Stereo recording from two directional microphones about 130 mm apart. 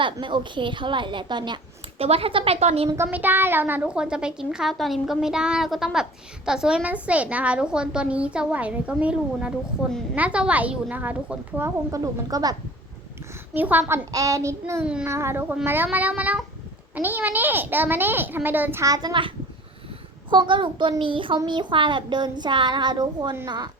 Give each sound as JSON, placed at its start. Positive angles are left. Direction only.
{"t": 0.0, "sound": "child singing", "side_deg": -40}
{"t": 2.0, "sound": "speech", "side_deg": -50}
{"t": 2.9, "sound": "a child's voice", "side_deg": -15}
{"t": 11.9, "sound": "a woman's voice", "side_deg": -25}
{"t": 13.5, "sound": "a woman's voice", "side_deg": -15}
{"t": 18.9, "sound": "child singing", "side_deg": -30}
{"t": 20.3, "sound": "child singing", "side_deg": -40}